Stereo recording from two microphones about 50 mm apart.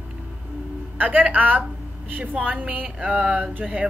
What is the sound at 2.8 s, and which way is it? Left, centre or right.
A woman's voice, centre.